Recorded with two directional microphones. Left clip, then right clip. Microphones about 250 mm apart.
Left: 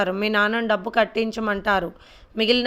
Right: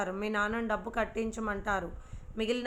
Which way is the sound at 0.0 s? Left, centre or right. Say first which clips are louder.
Left 11 dB; left.